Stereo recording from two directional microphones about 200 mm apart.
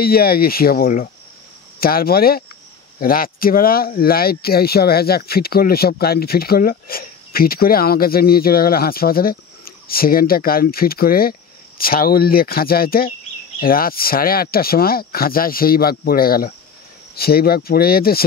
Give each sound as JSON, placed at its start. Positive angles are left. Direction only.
{"t": 0.0, "sound": "speech", "side_deg": 50}